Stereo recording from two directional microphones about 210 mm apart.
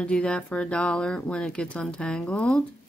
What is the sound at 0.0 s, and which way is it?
Speech, 5° left (ahead or behind).